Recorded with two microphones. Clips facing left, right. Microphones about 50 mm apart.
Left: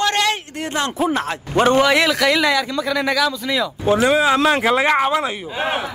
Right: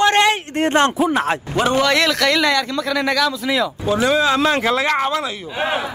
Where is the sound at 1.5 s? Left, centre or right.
Left.